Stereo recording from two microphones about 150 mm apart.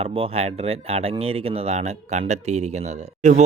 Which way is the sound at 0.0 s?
40° right (ahead or behind).